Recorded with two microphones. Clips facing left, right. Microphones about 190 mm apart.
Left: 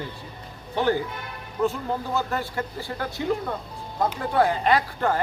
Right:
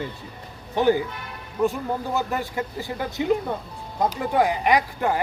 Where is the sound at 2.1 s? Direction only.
15° right (ahead or behind).